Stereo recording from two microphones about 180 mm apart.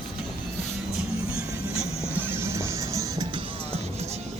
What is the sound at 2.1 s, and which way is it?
Music, 10° right (ahead or behind).